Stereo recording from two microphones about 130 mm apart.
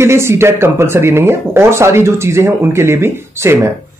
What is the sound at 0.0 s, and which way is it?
Speech, 20° right (ahead or behind).